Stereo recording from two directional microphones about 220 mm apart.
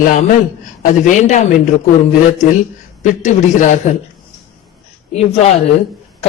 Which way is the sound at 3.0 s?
35° left (ahead or behind).